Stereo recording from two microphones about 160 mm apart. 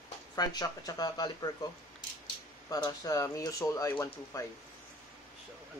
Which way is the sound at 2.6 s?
25° left (ahead or behind).